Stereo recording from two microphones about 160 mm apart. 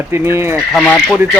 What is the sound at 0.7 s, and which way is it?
Speech, 5° left (ahead or behind).